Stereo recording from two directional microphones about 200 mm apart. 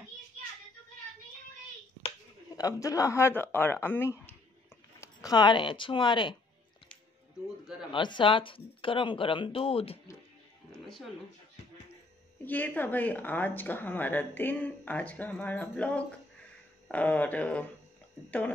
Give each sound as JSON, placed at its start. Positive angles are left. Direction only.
{"t": 2.0, "sound": "speech", "side_deg": 20}
{"t": 7.9, "sound": "speech", "side_deg": 25}
{"t": 12.4, "sound": "a woman's voice", "side_deg": 10}